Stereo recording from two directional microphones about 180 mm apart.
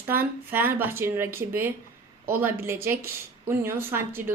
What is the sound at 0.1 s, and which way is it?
Speech, 10° right (ahead or behind).